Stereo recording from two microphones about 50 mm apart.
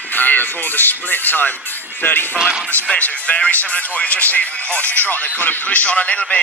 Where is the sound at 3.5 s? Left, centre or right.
Left.